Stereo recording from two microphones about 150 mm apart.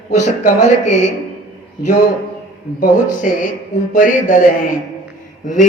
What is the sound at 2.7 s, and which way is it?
A man's voice, 60° left (ahead or behind).